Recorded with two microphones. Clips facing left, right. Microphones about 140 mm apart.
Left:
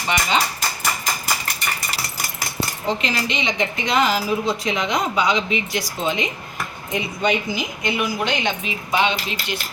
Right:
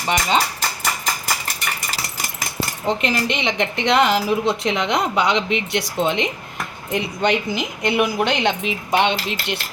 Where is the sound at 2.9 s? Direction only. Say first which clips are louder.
Right 3 dB; 55° right (ahead or behind).